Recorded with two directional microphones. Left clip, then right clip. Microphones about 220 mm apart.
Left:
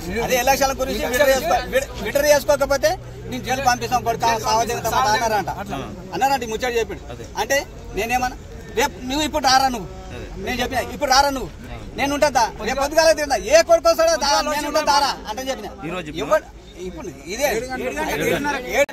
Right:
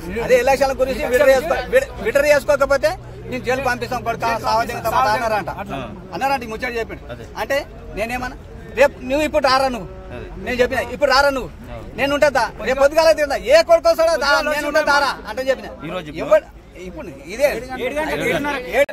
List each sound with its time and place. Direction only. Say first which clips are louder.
0.3 s a man's voice: right 4 dB; 5° right (ahead or behind)
15.8 s a man's voice: right 1 dB; 45° right (ahead or behind)
17.3 s a man's voice: right 4 dB; 5° right (ahead or behind)
17.7 s speech: right 2 dB; 35° right (ahead or behind)